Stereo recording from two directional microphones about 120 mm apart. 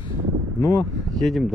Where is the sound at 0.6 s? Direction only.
25° left (ahead or behind).